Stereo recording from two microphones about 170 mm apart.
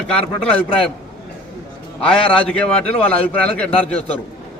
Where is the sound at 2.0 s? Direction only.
5° left (ahead or behind).